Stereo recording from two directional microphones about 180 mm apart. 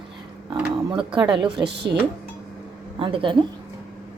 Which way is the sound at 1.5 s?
70° right (ahead or behind).